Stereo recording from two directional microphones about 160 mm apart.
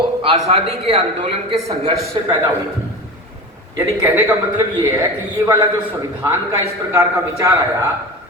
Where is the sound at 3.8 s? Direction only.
20° right (ahead or behind).